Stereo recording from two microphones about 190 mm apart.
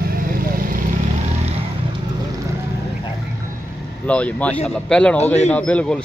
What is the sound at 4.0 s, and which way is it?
Speech, 5° left (ahead or behind).